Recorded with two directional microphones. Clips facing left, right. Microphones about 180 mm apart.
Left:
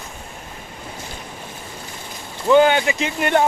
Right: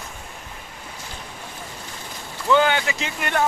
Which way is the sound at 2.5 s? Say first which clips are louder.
Left 5 dB; 20° left (ahead or behind).